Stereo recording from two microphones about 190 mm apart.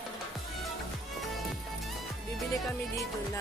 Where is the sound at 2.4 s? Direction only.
Centre (ahead or behind).